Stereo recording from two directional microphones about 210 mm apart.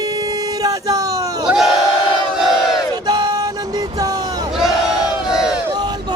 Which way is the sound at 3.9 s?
15° right (ahead or behind).